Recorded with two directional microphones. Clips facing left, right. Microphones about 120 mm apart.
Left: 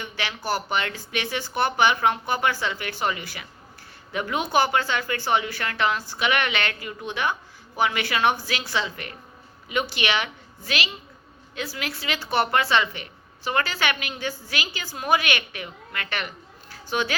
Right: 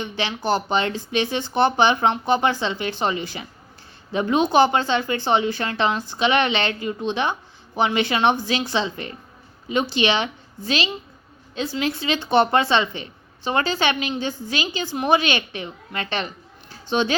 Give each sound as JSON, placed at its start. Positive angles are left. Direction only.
{"t": 0.0, "sound": "a woman's voice", "side_deg": -25}